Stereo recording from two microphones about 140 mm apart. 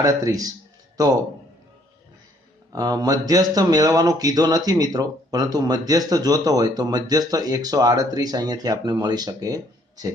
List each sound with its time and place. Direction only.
0.0 s a man's voice: 25° right (ahead or behind)
2.7 s speech: 25° right (ahead or behind)